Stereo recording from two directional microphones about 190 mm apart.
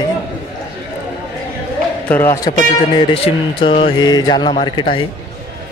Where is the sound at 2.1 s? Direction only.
10° left (ahead or behind).